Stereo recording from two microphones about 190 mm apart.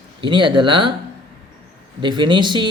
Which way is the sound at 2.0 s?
25° right (ahead or behind).